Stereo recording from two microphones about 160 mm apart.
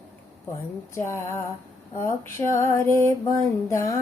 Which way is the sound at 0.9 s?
15° left (ahead or behind).